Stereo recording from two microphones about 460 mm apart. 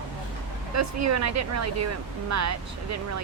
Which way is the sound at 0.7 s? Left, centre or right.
Right.